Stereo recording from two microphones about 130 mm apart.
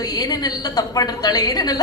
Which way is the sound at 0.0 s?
30° left (ahead or behind).